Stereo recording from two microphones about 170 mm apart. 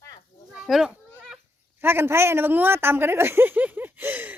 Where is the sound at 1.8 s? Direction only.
15° right (ahead or behind).